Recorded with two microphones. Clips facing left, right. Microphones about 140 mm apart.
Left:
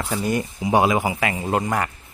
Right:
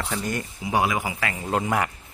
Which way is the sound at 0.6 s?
25° left (ahead or behind).